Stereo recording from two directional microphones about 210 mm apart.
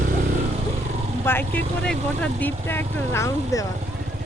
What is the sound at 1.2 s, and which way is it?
Speech, 10° left (ahead or behind).